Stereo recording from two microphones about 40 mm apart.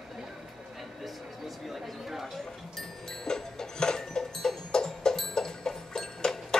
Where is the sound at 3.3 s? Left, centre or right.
Centre.